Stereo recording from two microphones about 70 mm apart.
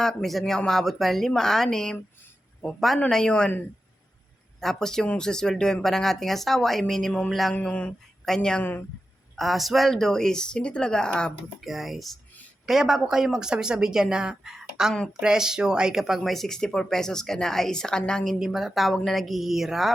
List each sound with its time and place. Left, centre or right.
0.0 s speech: centre
4.6 s speech: centre
8.2 s a woman's voice: centre
11.6 s speech: centre
18.3 s speech: centre